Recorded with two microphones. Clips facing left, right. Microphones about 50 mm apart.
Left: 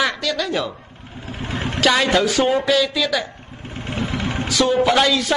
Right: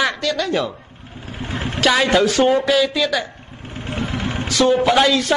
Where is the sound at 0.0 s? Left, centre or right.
Centre.